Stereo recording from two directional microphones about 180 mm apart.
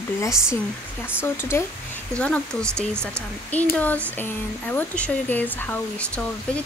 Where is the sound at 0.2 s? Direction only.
15° left (ahead or behind).